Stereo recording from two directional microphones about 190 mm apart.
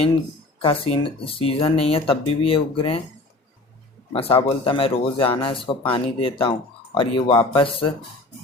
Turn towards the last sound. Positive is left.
turn(degrees=30)  # may be behind; listen again after turning